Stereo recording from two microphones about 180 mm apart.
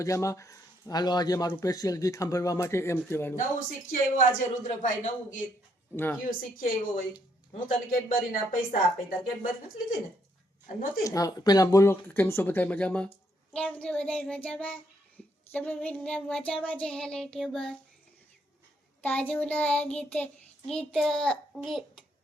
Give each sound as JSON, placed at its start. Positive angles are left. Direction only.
{"t": 0.0, "sound": "speech", "side_deg": 15}
{"t": 1.5, "sound": "child singing", "side_deg": 20}
{"t": 3.3, "sound": "a man's voice", "side_deg": 50}
{"t": 11.0, "sound": "child singing", "side_deg": 20}
{"t": 19.0, "sound": "child singing", "side_deg": 10}